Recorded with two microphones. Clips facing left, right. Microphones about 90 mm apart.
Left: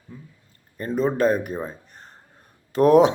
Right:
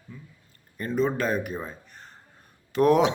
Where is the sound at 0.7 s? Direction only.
35° left (ahead or behind).